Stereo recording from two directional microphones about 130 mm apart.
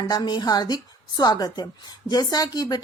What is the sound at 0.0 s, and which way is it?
A woman's voice, 35° left (ahead or behind).